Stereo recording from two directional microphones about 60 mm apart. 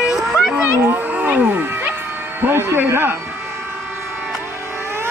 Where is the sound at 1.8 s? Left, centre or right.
Right.